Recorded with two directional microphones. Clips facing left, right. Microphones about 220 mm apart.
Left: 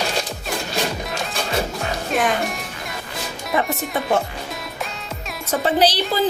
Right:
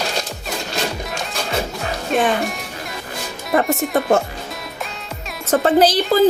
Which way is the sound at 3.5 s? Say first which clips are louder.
Right 5 dB; 45° right (ahead or behind).